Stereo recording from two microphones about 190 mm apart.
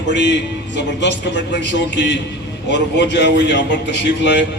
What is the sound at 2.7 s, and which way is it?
A man's voice, 65° left (ahead or behind).